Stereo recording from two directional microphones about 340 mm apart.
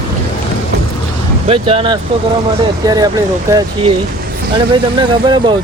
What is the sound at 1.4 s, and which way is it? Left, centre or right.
Speech, centre.